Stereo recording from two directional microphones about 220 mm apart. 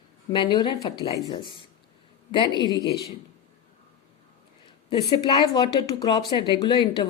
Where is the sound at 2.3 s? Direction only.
20° left (ahead or behind).